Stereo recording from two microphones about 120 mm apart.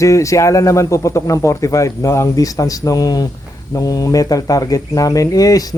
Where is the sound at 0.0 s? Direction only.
25° left (ahead or behind).